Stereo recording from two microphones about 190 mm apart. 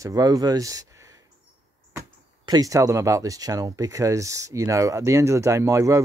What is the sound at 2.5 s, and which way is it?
Speech, 20° right (ahead or behind).